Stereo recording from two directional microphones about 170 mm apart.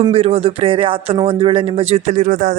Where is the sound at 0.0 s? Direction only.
35° right (ahead or behind).